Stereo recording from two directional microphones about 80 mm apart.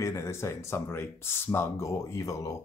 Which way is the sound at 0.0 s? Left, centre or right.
Left.